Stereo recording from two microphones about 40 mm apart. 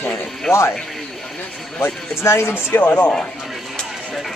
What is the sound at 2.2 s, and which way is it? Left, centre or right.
Speech, left.